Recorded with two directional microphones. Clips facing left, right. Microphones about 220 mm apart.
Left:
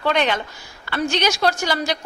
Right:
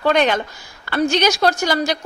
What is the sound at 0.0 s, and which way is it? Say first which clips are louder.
A woman's voice: right 4 dB; 45° right (ahead or behind).